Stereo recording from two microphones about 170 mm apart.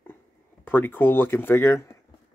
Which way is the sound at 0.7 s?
10° left (ahead or behind).